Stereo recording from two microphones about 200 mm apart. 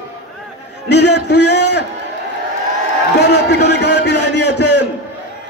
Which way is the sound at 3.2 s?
55° left (ahead or behind).